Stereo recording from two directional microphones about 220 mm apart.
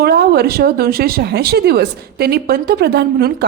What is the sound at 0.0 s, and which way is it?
Speech, 45° right (ahead or behind).